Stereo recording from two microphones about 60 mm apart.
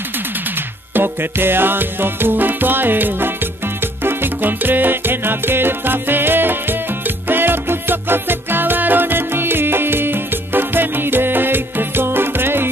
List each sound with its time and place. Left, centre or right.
0.9 s music: right